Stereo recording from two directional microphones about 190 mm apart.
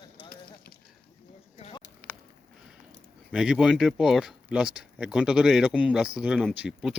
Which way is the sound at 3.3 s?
5° right (ahead or behind).